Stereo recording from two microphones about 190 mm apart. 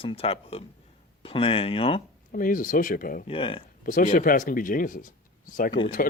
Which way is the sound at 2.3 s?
45° left (ahead or behind).